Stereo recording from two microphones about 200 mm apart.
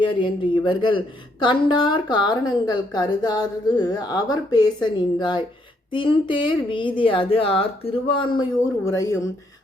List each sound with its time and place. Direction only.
0.0 s a woman's voice: 25° left (ahead or behind)
8.8 s speech: 15° left (ahead or behind)